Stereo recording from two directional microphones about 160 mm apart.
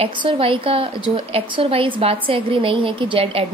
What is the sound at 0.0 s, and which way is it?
A woman's voice, 30° right (ahead or behind).